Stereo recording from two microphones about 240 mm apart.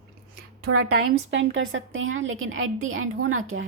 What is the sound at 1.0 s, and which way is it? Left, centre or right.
A woman's voice, right.